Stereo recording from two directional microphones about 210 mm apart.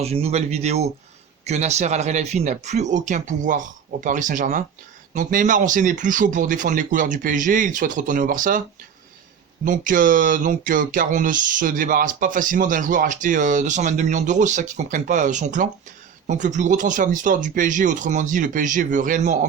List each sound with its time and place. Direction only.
0.0 s speech: 30° right (ahead or behind)
9.6 s speech: 40° right (ahead or behind)